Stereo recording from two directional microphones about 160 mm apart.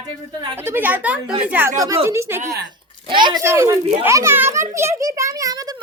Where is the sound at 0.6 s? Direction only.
15° right (ahead or behind).